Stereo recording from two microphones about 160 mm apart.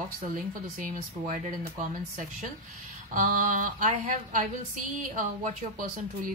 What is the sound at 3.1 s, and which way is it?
Speech, 55° right (ahead or behind).